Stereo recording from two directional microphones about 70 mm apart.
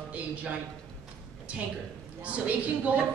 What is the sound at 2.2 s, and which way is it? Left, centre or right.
Speech, centre.